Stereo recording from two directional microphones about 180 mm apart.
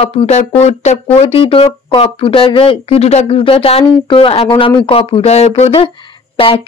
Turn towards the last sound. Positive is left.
turn(degrees=30)  # may be behind; listen again after turning